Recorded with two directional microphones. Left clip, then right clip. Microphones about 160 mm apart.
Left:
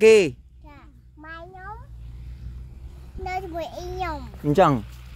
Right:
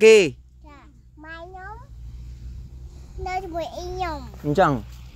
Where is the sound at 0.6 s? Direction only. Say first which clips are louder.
Right 1 dB; 10° left (ahead or behind).